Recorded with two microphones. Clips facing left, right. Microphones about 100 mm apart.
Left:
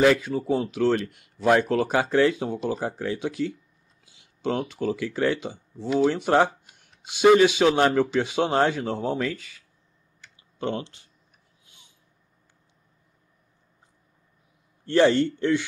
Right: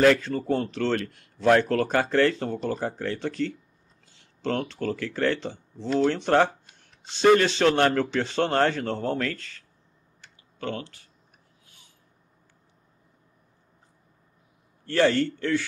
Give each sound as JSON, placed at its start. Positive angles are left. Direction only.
{"t": 0.0, "sound": "speech", "side_deg": 10}
{"t": 10.6, "sound": "a man's voice", "side_deg": 20}
{"t": 11.6, "sound": "a sound", "side_deg": 20}
{"t": 14.9, "sound": "a man's voice", "side_deg": 20}